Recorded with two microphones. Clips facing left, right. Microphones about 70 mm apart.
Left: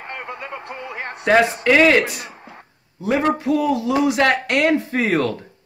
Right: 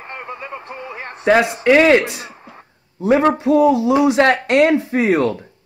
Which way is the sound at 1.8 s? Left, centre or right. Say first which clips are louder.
Even; right.